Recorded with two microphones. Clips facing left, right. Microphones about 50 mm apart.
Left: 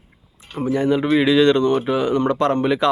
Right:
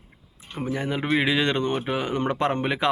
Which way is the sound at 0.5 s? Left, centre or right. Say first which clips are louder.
Left 9 dB; centre.